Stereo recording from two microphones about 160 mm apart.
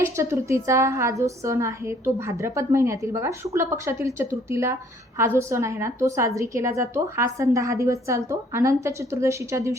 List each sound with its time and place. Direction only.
0.0 s a woman's voice: 15° right (ahead or behind)